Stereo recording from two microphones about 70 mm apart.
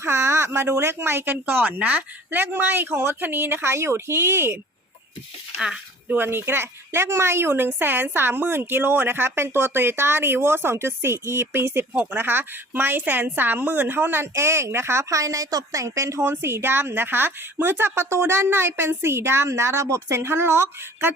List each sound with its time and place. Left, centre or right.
0.0 s a woman's voice: right
5.5 s speech: centre
6.1 s a woman's voice: right